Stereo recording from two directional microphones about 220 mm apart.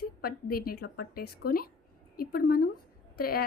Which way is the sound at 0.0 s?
45° left (ahead or behind).